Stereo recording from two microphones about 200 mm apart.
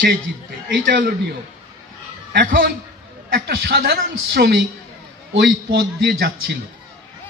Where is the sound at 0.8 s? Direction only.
45° right (ahead or behind).